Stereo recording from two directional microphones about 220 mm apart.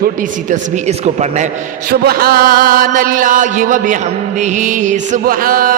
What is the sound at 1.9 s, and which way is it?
A man's voice, 45° right (ahead or behind).